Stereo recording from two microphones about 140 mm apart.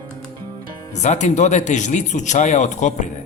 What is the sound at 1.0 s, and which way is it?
Speech, 55° left (ahead or behind).